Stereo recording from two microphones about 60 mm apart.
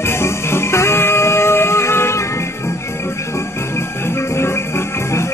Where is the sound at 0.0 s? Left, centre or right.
Left.